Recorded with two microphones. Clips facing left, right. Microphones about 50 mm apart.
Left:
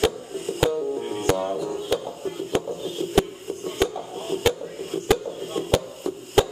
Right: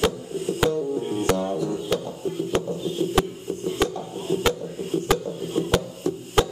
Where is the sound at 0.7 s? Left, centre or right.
Centre.